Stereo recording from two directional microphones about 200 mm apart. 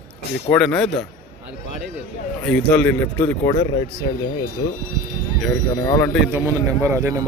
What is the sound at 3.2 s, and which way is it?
Speech, 20° left (ahead or behind).